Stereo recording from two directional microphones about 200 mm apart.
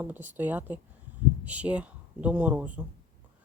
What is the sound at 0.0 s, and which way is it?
Speech, 10° right (ahead or behind).